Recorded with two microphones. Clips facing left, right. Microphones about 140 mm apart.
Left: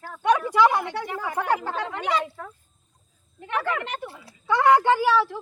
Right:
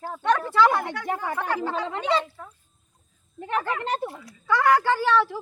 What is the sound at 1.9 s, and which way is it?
Speech, 30° right (ahead or behind).